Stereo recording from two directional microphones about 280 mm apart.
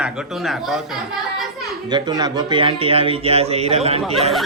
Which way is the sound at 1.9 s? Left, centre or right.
Centre.